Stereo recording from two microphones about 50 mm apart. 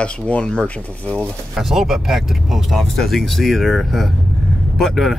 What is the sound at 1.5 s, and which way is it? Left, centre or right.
Speech, centre.